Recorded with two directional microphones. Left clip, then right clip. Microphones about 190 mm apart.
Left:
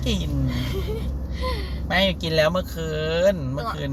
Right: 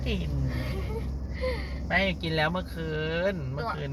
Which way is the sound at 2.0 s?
15° left (ahead or behind).